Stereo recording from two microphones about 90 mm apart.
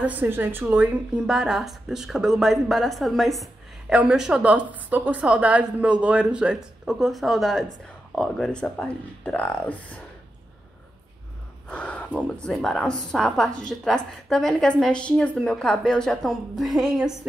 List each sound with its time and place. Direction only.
0.0 s a woman's voice: 20° right (ahead or behind)
1.2 s a woman's voice: 5° right (ahead or behind); by 9.9 s 15° left (ahead or behind)
11.7 s a sound: 15° left (ahead or behind)
12.4 s a woman's voice: 5° left (ahead or behind)